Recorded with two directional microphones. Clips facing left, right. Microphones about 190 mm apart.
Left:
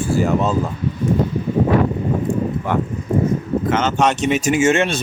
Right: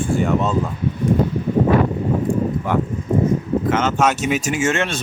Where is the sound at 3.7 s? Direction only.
Centre (ahead or behind).